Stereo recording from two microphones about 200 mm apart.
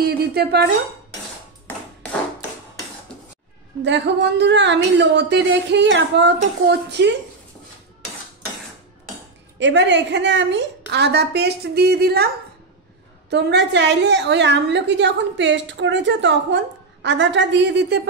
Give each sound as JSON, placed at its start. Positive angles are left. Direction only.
{"t": 0.0, "sound": "speech", "side_deg": -50}
{"t": 3.1, "sound": "a sound", "side_deg": 5}
{"t": 3.8, "sound": "a woman's voice", "side_deg": -60}
{"t": 9.6, "sound": "a woman's voice", "side_deg": -65}
{"t": 13.3, "sound": "a woman's voice", "side_deg": -60}